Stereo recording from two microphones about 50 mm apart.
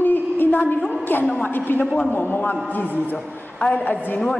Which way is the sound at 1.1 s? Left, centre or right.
Left.